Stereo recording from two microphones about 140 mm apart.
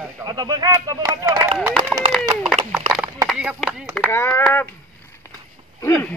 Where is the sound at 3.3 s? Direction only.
5° right (ahead or behind).